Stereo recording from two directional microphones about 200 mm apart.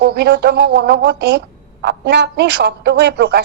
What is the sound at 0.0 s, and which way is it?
Speech, 55° right (ahead or behind).